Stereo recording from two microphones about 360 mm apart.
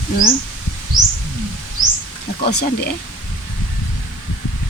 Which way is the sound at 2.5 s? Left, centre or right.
Left.